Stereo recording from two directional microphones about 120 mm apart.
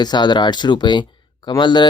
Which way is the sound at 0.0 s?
35° left (ahead or behind).